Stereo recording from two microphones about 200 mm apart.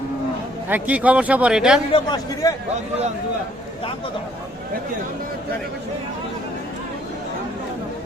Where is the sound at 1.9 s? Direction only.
20° left (ahead or behind).